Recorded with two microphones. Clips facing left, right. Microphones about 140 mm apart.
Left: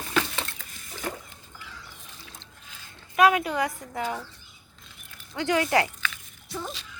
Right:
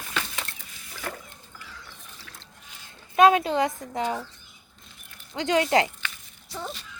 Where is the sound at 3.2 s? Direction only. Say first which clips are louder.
Right 3 dB; 25° right (ahead or behind).